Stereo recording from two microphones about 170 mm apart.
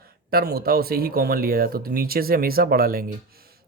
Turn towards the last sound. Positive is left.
turn(degrees=-60)  # may be behind; listen again after turning